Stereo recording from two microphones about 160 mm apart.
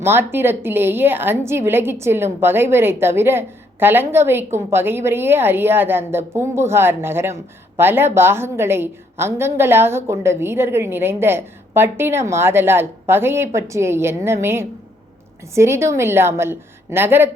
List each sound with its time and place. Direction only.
0.0 s a woman's voice: 15° right (ahead or behind)